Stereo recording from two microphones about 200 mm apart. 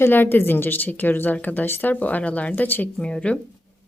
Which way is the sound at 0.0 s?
10° left (ahead or behind).